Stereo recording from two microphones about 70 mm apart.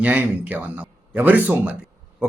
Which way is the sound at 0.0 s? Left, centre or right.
Right.